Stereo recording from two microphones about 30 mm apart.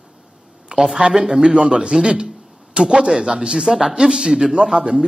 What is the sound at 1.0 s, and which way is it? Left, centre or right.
A man's voice, right.